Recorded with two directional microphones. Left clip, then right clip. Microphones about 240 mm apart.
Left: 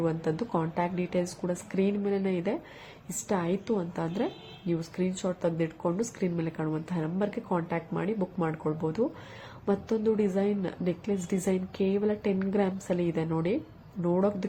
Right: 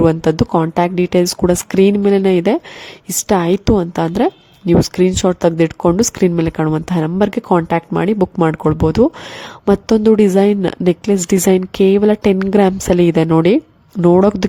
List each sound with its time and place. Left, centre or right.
0.0 s a woman's voice: right